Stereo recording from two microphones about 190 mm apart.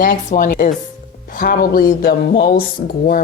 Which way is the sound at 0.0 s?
45° left (ahead or behind).